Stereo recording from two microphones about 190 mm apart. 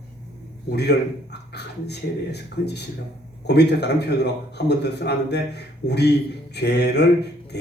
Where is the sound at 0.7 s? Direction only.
60° left (ahead or behind).